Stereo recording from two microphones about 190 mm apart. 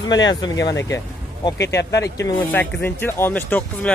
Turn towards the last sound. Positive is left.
turn(degrees=10)  # may be behind; listen again after turning